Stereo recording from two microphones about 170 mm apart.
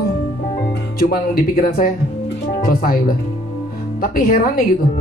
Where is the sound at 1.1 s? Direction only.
60° left (ahead or behind).